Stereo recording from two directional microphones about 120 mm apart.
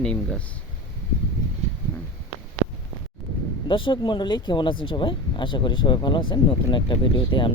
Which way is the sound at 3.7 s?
45° left (ahead or behind).